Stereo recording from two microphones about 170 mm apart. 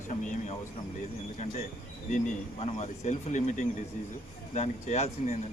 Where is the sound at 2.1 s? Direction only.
40° left (ahead or behind).